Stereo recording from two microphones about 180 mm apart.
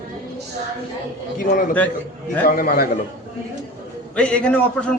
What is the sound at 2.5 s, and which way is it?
Speech, 55° left (ahead or behind).